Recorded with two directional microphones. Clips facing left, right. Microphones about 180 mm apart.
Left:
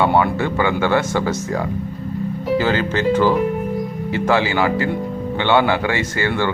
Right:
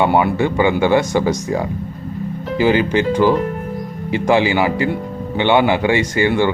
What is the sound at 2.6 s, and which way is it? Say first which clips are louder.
Speech: right 6 dB; 15° right (ahead or behind).